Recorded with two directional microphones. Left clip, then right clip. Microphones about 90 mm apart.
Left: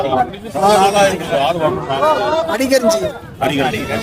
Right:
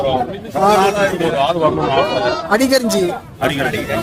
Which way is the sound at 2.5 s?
25° right (ahead or behind).